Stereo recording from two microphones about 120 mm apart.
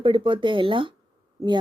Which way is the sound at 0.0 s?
45° right (ahead or behind).